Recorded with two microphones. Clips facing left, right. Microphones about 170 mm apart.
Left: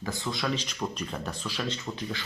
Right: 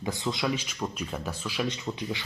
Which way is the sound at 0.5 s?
10° right (ahead or behind).